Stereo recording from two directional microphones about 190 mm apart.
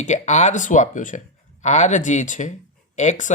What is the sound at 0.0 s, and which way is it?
Speech, 40° left (ahead or behind).